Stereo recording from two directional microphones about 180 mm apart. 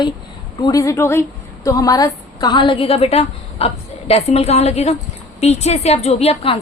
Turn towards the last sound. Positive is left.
turn(degrees=35)  # may be behind; listen again after turning